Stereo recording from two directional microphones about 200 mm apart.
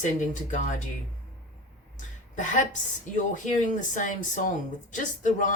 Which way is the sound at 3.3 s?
40° left (ahead or behind).